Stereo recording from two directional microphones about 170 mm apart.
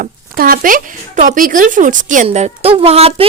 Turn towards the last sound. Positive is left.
turn(degrees=-35)  # may be behind; listen again after turning